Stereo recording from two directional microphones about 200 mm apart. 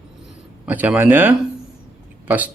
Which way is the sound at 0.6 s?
10° right (ahead or behind).